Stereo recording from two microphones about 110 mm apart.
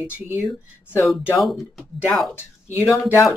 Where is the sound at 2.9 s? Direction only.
25° left (ahead or behind).